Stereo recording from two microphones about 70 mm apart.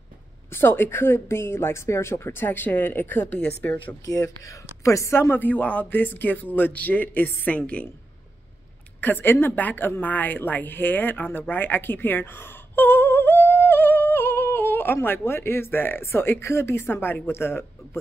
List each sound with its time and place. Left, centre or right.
0.5 s speech: left
4.0 s speech: left
5.3 s a man's voice: left
9.0 s a woman's voice: left